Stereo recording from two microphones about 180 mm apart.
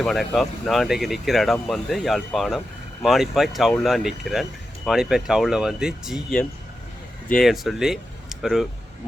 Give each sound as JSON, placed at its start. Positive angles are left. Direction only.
{"t": 0.0, "sound": "speech", "side_deg": 0}